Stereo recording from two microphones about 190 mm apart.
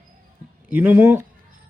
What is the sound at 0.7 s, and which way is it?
Speech, 10° right (ahead or behind).